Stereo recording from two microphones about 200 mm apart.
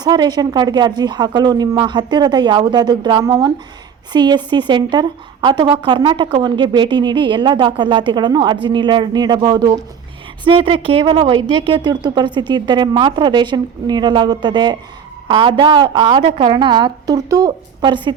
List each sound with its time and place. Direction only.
0.0 s a woman's voice: 20° right (ahead or behind)